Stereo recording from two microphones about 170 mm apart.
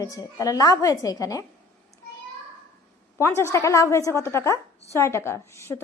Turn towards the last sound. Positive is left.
turn(degrees=15)  # may be behind; listen again after turning